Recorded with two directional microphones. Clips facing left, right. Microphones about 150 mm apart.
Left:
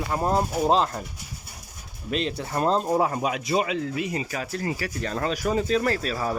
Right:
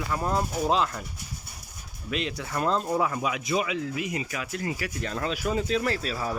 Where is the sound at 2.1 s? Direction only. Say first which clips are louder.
Left 3 dB; 35° left (ahead or behind).